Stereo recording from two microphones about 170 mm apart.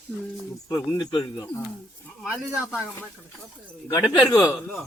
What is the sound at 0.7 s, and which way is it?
Speech, 25° left (ahead or behind).